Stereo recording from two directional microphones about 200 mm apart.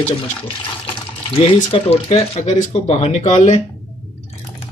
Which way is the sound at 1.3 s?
30° left (ahead or behind).